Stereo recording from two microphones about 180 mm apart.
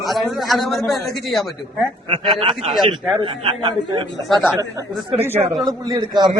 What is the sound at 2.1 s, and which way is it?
A man's voice, 25° right (ahead or behind).